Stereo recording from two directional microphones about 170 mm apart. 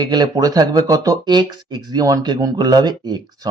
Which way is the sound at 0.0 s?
25° right (ahead or behind).